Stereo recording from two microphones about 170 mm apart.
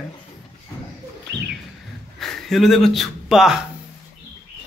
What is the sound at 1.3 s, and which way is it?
Bird, 90° right.